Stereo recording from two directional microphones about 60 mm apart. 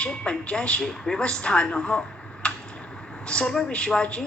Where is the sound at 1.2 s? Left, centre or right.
Centre.